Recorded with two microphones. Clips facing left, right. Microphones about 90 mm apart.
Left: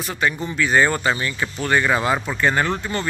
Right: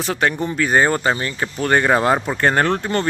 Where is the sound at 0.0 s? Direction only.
65° right (ahead or behind); by 2.3 s 45° right (ahead or behind).